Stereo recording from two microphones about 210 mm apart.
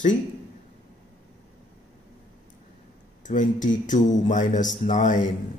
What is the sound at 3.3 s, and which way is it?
Speech, 35° left (ahead or behind).